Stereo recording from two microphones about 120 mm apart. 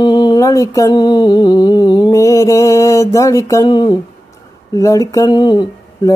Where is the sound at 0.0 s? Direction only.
35° left (ahead or behind).